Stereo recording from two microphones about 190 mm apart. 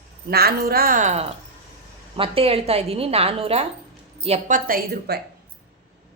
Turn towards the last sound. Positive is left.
turn(degrees=-50)  # may be behind; listen again after turning